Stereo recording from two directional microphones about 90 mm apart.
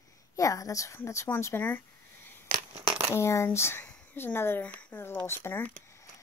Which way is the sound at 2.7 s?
65° right (ahead or behind).